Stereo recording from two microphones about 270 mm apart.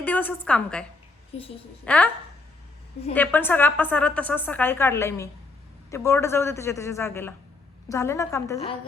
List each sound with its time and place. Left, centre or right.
0.0 s a woman's voice: centre
1.3 s a woman's voice: left
1.8 s a woman's voice: centre
3.1 s a woman's voice: centre